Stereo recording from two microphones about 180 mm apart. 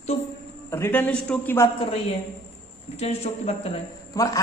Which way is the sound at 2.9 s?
35° left (ahead or behind).